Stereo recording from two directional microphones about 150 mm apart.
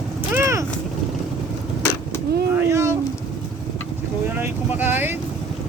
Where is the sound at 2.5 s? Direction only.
20° right (ahead or behind).